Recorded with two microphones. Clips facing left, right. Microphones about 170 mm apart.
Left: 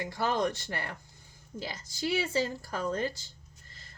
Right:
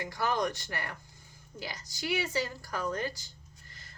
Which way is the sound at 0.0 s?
25° left (ahead or behind).